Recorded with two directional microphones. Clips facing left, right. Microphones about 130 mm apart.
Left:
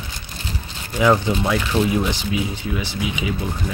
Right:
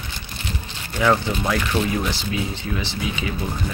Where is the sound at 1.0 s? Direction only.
10° left (ahead or behind).